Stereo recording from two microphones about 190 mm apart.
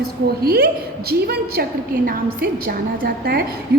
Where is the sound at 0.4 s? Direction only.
50° right (ahead or behind).